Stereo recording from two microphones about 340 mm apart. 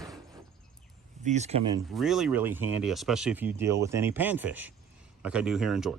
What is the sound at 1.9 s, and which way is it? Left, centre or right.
Speech, centre.